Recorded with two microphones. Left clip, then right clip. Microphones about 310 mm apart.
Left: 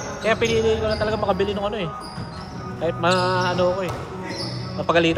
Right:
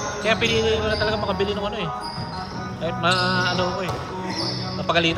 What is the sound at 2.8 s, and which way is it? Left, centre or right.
A man's voice, left.